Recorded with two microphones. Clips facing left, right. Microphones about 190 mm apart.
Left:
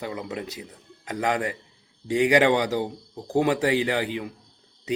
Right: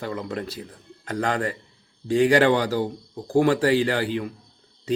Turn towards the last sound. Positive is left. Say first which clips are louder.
# right 2 dB
turn(degrees=15)  # may be behind; listen again after turning